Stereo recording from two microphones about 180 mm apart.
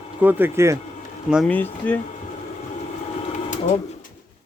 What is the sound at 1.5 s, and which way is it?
Speech, 10° left (ahead or behind).